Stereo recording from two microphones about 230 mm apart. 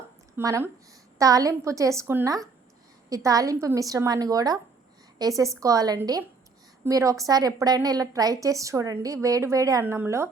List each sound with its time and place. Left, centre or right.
0.3 s a woman's voice: centre